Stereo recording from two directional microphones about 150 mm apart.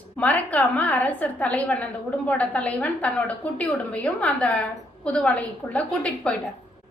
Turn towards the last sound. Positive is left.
turn(degrees=10)  # may be behind; listen again after turning